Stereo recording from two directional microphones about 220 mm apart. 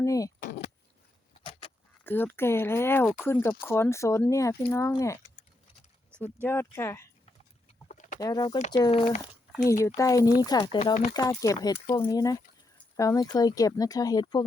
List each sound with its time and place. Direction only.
0.0 s speech: 15° left (ahead or behind)
2.0 s speech: 10° left (ahead or behind)
6.2 s speech: 10° left (ahead or behind)
7.9 s bird: 35° left (ahead or behind)
8.2 s speech: 20° left (ahead or behind)
9.8 s speech: 15° left (ahead or behind); by 11.1 s 30° left (ahead or behind)
11.1 s speech: 15° left (ahead or behind)